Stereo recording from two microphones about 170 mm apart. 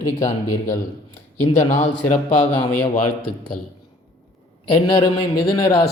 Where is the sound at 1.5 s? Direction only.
40° left (ahead or behind).